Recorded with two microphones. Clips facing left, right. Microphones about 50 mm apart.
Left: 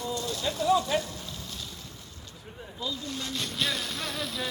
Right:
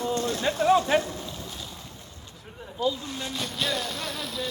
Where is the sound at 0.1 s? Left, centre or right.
Right.